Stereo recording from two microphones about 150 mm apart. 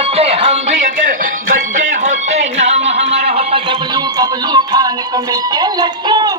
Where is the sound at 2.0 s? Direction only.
50° right (ahead or behind).